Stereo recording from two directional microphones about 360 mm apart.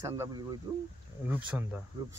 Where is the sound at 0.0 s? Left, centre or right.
Centre.